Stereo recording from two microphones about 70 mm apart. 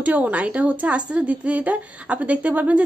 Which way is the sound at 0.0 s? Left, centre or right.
Right.